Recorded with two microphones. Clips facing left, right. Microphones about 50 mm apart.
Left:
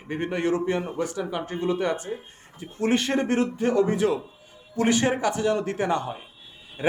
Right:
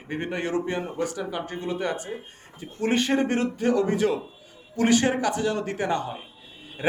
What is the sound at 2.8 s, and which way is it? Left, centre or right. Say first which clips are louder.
Speech: even; centre.